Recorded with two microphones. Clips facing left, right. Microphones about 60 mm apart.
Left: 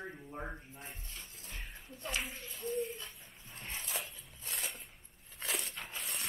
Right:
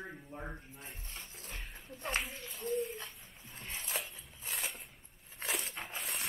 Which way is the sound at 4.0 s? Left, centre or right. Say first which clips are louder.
Even; centre.